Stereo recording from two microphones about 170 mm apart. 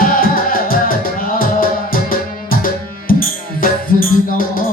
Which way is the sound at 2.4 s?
55° left (ahead or behind).